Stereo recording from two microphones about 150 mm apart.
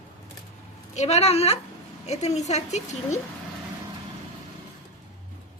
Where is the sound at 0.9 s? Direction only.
45° left (ahead or behind).